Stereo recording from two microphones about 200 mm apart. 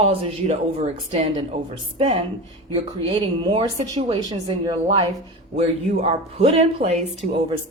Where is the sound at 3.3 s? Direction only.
20° right (ahead or behind).